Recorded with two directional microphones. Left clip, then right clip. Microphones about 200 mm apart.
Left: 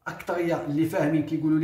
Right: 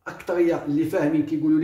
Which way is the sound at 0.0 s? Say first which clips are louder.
Right 5 dB; 15° right (ahead or behind).